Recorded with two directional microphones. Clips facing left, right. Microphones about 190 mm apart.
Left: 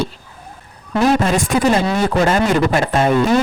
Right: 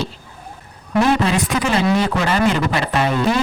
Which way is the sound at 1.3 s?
45° left (ahead or behind).